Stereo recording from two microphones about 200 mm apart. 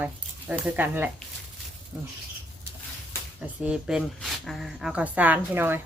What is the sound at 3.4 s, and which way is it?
Speech, 5° right (ahead or behind).